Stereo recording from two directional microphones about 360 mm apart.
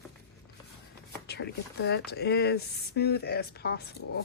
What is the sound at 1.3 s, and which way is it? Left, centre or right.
Speech, left.